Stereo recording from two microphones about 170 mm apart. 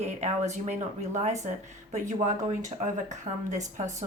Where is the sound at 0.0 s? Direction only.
45° right (ahead or behind).